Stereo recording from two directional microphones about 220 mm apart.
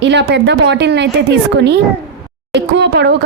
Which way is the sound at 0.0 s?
50° right (ahead or behind).